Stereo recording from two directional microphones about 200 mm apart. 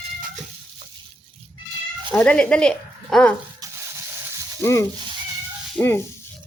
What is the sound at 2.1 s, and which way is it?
Speech, 5° left (ahead or behind).